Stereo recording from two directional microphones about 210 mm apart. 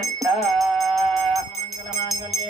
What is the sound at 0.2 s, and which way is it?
Music, centre (ahead or behind).